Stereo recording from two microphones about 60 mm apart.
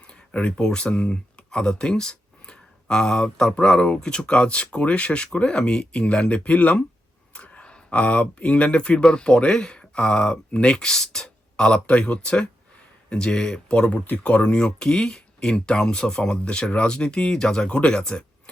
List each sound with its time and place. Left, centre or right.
0.1 s speech: centre